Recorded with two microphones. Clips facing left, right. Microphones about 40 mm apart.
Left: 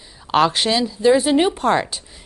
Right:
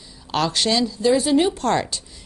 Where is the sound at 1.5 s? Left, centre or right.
Centre.